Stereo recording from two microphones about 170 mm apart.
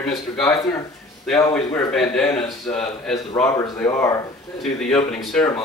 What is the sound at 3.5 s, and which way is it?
Speech, 20° left (ahead or behind).